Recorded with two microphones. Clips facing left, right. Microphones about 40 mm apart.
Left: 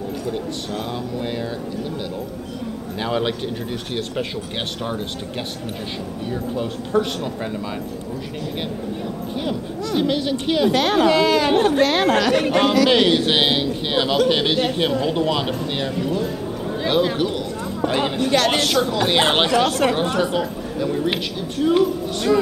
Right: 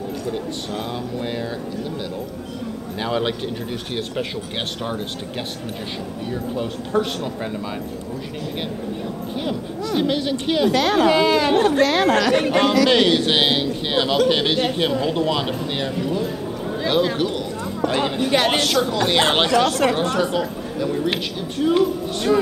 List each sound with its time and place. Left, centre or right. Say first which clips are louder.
3.0 s a man's voice: even; centre
6.5 s a man's voice: left 1 dB; centre
9.4 s a man's voice: even; centre
10.7 s speech: even; left
11.1 s a man's voice: even; centre
11.9 s speech: even; left
12.4 s a man's voice: even; centre
18.2 s a woman's voice: even; centre
18.6 s a woman's voice: even; centre